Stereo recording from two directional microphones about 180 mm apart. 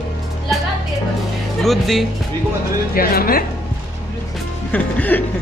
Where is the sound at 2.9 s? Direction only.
55° left (ahead or behind).